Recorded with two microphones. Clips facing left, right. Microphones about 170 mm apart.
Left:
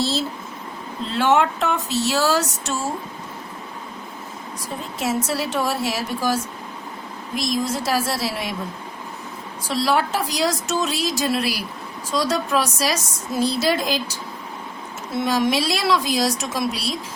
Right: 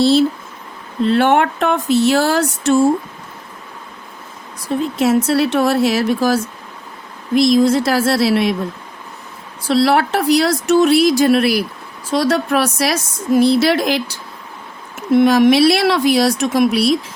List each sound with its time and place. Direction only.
0.0 s a woman's voice: 65° right (ahead or behind)
4.9 s a woman's voice: 70° right (ahead or behind)
9.6 s a woman's voice: 70° right (ahead or behind)
15.1 s speech: 65° right (ahead or behind)